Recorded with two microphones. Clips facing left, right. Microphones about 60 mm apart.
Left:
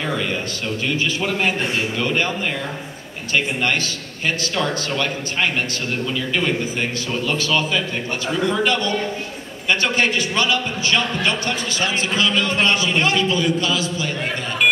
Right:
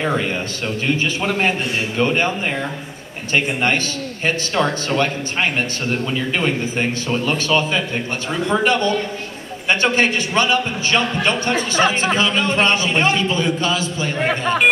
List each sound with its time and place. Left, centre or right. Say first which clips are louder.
0.0 s speech: right 3 dB; right
3.3 s a man's voice: right 2 dB; right